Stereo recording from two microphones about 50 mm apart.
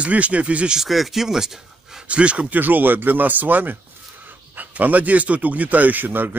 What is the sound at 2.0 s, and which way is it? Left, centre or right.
Speech, right.